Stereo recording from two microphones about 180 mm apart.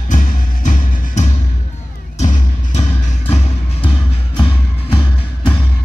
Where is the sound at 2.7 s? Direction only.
35° left (ahead or behind).